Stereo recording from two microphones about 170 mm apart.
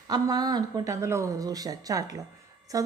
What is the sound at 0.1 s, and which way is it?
Speech, 25° right (ahead or behind).